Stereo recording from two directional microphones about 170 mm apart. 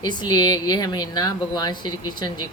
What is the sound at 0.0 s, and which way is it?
Speech, 25° left (ahead or behind).